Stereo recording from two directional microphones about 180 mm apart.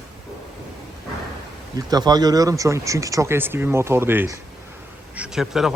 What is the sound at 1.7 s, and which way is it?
Speech, 20° right (ahead or behind).